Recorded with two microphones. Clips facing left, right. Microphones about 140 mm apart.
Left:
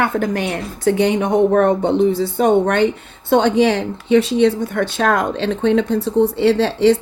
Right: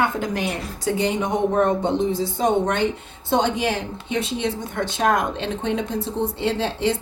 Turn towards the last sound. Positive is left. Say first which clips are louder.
# left 9 dB
turn(degrees=75)  # may be behind; listen again after turning